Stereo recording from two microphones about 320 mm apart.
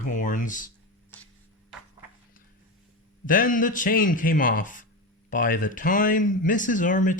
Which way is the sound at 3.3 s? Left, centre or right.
Left.